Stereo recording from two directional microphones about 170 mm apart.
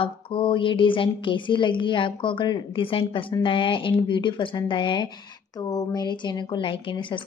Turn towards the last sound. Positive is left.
turn(degrees=30)  # may be behind; listen again after turning